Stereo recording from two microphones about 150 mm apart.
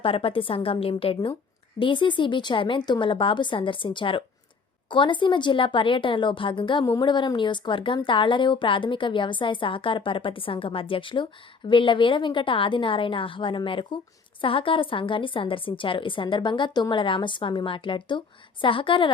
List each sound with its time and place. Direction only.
0.0 s speech: 40° left (ahead or behind)